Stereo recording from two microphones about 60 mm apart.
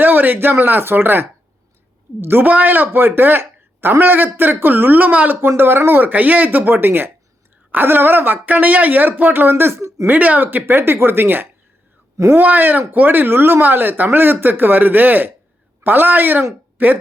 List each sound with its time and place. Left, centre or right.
0.0 s speech: right
10.1 s speech: right